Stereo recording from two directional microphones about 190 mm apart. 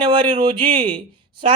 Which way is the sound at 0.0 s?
25° right (ahead or behind).